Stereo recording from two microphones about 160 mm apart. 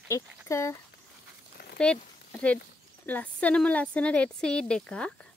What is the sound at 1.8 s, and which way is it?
Speech, 5° left (ahead or behind).